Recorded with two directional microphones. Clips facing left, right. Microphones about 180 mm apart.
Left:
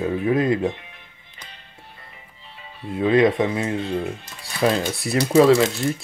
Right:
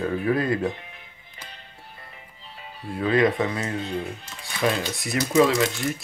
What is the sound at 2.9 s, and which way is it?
Speech, 20° left (ahead or behind).